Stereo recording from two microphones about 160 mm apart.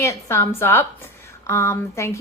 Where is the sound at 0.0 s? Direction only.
15° left (ahead or behind).